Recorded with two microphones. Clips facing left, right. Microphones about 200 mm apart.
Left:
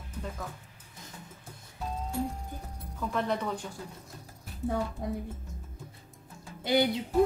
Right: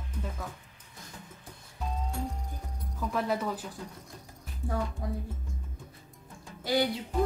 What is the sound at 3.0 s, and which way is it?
Speech, 5° right (ahead or behind).